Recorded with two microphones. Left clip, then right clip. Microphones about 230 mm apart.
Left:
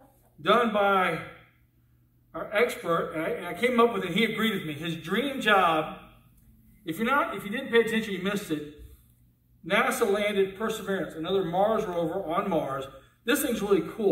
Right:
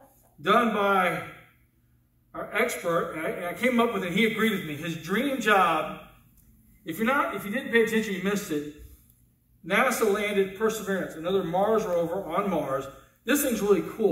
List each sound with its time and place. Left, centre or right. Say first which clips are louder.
0.4 s a man's voice: even; left
2.3 s a man's voice: left 1 dB; left
9.7 s a man's voice: right 1 dB; left